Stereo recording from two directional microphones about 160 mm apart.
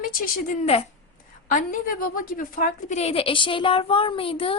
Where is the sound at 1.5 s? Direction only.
60° left (ahead or behind).